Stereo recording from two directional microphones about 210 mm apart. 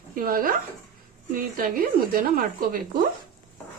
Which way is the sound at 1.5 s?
45° right (ahead or behind).